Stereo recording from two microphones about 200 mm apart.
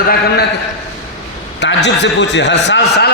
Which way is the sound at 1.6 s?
60° left (ahead or behind).